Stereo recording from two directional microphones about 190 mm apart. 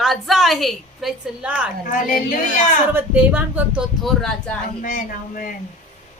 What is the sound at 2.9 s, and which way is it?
Speech, 10° right (ahead or behind).